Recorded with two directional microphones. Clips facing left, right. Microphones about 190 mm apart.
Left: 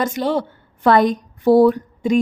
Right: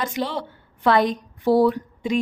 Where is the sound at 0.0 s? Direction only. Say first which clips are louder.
Left 6 dB; 45° left (ahead or behind).